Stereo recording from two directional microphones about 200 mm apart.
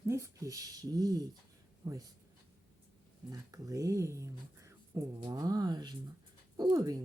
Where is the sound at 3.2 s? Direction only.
15° right (ahead or behind).